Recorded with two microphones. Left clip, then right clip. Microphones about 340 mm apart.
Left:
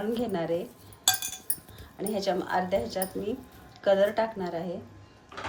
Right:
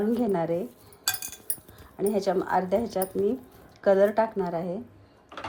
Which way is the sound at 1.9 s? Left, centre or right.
Centre.